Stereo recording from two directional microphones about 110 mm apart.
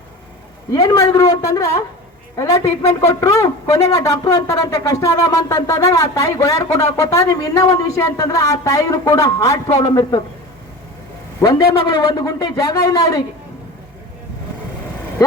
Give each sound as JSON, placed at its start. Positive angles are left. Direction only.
{"t": 0.7, "sound": "a man's voice", "side_deg": 35}
{"t": 2.3, "sound": "a sound", "side_deg": 25}
{"t": 11.3, "sound": "a man's voice", "side_deg": 30}